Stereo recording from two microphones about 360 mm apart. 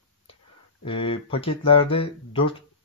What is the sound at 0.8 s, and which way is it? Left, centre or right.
Speech, centre.